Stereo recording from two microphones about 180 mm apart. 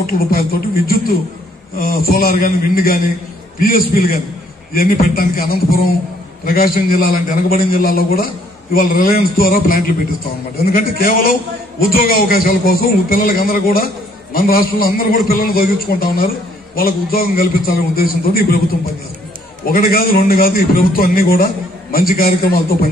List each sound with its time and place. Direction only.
0.0 s a man's voice: 55° left (ahead or behind)
19.7 s a man's voice: 55° left (ahead or behind)